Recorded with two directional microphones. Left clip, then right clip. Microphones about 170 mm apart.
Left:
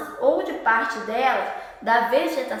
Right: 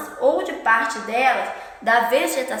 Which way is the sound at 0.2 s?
25° right (ahead or behind).